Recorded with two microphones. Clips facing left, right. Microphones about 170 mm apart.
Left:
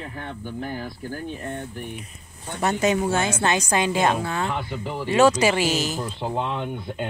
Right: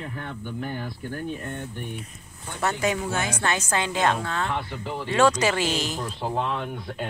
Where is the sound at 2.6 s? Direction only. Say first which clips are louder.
Left 4 dB; 20° left (ahead or behind); by 6.0 s 5° left (ahead or behind).